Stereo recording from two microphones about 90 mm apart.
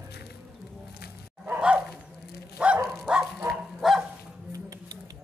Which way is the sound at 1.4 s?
15° right (ahead or behind).